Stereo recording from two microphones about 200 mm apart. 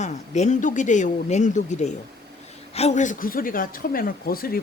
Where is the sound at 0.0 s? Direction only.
35° left (ahead or behind).